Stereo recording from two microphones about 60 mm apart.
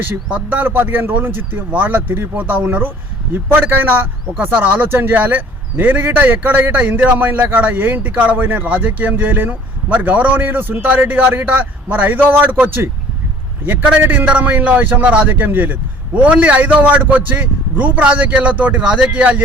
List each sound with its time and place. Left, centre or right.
0.3 s speech: right
3.3 s a man's voice: right
15.3 s a man's voice: right